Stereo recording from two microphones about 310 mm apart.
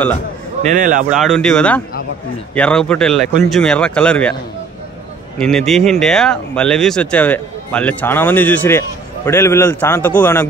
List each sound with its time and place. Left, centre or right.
0.7 s speech: right
1.1 s speech: centre
5.4 s speech: centre